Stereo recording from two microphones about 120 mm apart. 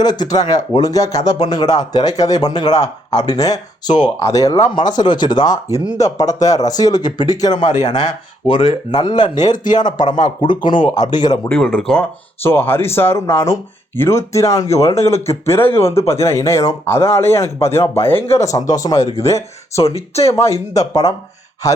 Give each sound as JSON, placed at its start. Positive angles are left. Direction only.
{"t": 0.0, "sound": "speech", "side_deg": 35}
{"t": 11.4, "sound": "speech", "side_deg": 5}
{"t": 11.9, "sound": "speech", "side_deg": 20}
{"t": 19.8, "sound": "speech", "side_deg": 60}
{"t": 20.7, "sound": "speech", "side_deg": 30}